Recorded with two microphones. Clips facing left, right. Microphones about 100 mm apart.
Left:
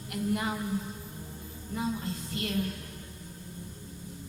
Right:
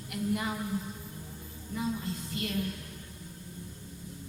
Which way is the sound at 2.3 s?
30° left (ahead or behind).